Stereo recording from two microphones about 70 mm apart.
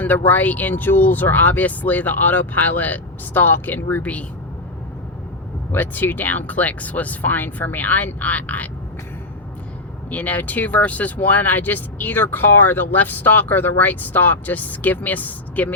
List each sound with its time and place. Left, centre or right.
0.0 s speech: left
5.7 s speech: left
10.1 s speech: left